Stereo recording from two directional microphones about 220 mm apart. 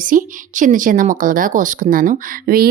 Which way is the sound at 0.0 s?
35° right (ahead or behind).